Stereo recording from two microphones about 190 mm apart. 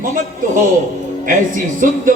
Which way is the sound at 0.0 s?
45° right (ahead or behind).